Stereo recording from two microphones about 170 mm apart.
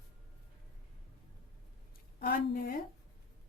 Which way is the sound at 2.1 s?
55° left (ahead or behind).